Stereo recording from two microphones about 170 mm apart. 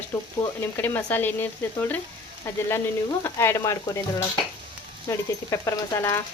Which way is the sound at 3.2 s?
15° left (ahead or behind).